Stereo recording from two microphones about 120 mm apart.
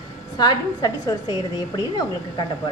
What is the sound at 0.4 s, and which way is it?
Speech, 35° left (ahead or behind).